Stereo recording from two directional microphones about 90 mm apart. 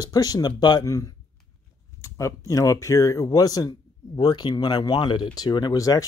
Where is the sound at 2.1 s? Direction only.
35° left (ahead or behind).